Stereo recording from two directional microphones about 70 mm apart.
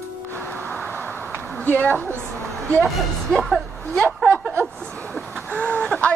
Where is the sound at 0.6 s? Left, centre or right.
Centre.